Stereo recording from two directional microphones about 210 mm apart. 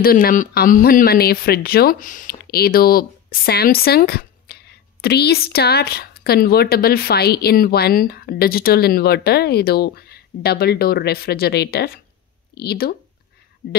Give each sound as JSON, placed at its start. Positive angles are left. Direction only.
{"t": 0.0, "sound": "speech", "side_deg": 45}